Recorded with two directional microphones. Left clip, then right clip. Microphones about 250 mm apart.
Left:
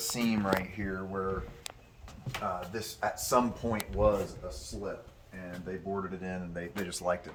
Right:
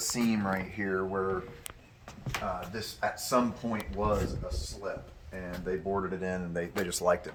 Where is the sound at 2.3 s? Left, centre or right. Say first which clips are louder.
Even; centre.